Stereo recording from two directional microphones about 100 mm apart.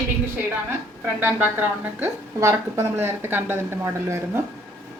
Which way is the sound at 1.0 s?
20° right (ahead or behind).